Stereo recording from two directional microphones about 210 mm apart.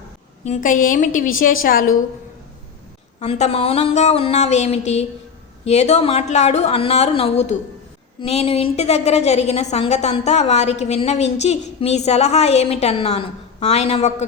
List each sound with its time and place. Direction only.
0.4 s a woman's voice: 35° left (ahead or behind)
3.2 s a woman's voice: 35° left (ahead or behind)